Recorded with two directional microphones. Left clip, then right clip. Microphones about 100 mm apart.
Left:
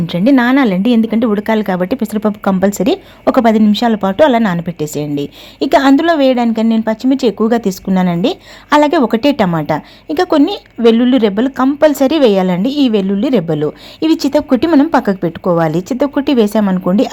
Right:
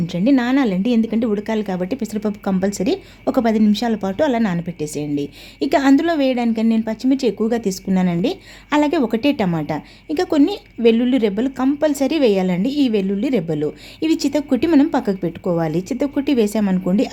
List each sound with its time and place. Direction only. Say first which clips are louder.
0.1 s a woman's voice: left 7 dB; 30° left (ahead or behind)